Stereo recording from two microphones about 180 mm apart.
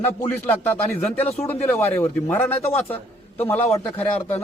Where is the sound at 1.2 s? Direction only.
35° left (ahead or behind).